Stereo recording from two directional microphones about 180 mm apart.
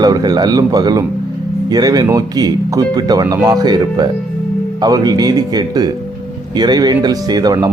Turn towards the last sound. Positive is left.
turn(degrees=-20)  # may be behind; listen again after turning